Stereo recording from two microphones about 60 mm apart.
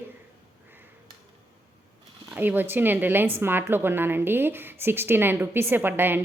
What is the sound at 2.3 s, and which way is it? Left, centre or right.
A woman's voice, right.